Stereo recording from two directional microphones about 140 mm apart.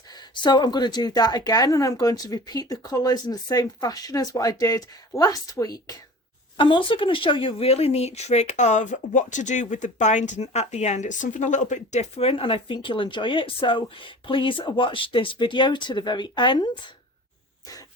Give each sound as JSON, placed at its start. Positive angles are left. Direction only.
{"t": 0.1, "sound": "a woman's voice", "side_deg": 30}
{"t": 6.6, "sound": "speech", "side_deg": 35}